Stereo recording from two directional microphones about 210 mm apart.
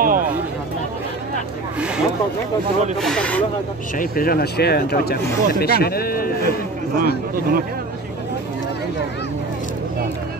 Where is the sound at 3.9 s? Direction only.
45° left (ahead or behind).